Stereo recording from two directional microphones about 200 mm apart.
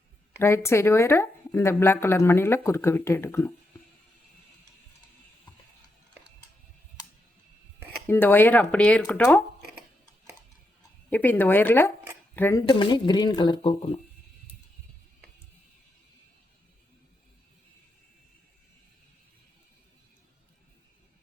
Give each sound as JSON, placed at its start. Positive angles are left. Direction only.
{"t": 0.3, "sound": "speech", "side_deg": 10}
{"t": 8.0, "sound": "speech", "side_deg": 10}
{"t": 11.1, "sound": "speech", "side_deg": 10}
{"t": 12.6, "sound": "speech", "side_deg": 20}